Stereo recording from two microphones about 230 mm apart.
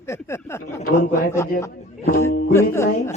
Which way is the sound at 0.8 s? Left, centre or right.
Left.